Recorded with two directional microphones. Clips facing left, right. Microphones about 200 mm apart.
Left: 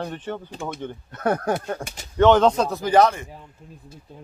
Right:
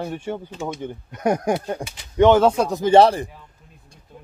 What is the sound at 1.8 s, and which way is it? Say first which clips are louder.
Speech: right 2 dB; 45° left (ahead or behind).